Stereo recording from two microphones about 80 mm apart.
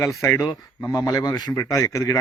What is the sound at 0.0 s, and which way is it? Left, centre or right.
Speech, left.